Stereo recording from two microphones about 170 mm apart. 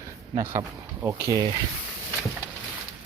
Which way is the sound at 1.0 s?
20° right (ahead or behind).